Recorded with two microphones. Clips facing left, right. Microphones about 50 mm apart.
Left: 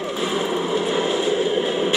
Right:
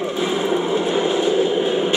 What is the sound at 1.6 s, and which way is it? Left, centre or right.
Vehicle, right.